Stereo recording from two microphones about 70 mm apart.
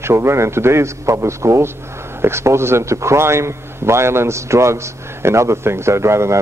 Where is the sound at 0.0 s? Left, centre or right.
Right.